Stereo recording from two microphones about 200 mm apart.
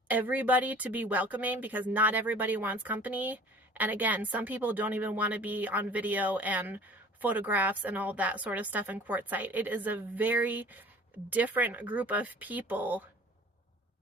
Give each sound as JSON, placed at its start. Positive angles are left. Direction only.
{"t": 0.1, "sound": "speech", "side_deg": -10}